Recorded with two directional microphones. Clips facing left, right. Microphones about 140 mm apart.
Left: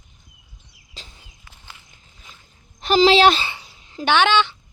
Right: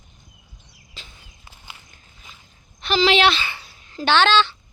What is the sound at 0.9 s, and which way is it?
Walk, 35° left (ahead or behind).